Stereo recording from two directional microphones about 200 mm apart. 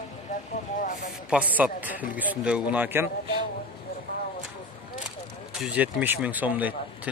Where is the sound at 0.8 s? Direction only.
40° left (ahead or behind).